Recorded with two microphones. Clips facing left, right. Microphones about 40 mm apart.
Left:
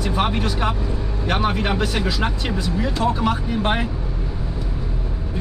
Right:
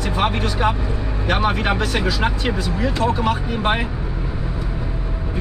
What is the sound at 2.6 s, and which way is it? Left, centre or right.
Speech, centre.